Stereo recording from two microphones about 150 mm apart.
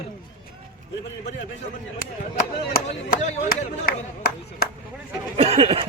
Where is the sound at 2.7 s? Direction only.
80° left.